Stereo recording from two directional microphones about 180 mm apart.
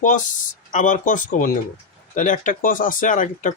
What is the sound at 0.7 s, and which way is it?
Speech, 45° left (ahead or behind).